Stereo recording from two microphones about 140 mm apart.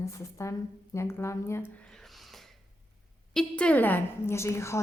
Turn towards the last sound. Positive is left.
turn(degrees=20)  # may be behind; listen again after turning